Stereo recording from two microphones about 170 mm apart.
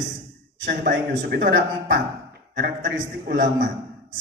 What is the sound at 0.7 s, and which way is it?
A man's voice, 90° right.